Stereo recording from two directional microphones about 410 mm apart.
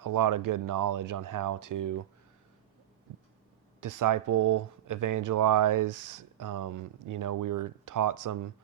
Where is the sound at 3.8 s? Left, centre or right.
Right.